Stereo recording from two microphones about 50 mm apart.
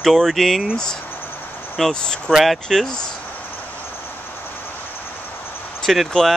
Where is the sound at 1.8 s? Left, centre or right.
Centre.